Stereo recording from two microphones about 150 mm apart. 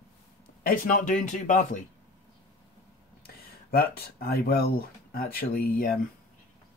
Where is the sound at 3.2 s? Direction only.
90° left; by 5.9 s 70° left (ahead or behind).